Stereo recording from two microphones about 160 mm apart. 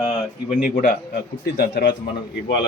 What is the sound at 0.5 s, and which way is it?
Speech, 60° left (ahead or behind).